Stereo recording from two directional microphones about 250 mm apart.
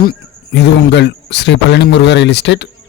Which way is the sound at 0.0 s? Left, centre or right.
Left.